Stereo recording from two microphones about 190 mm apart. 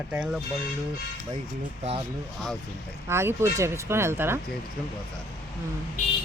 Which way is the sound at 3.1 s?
15° right (ahead or behind).